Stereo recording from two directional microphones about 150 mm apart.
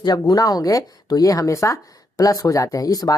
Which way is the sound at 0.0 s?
25° left (ahead or behind).